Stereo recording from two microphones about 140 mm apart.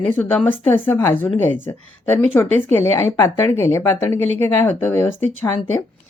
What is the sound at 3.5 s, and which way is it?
A woman's voice, 20° left (ahead or behind).